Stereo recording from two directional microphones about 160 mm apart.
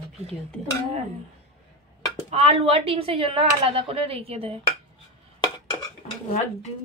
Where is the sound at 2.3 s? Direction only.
40° right (ahead or behind).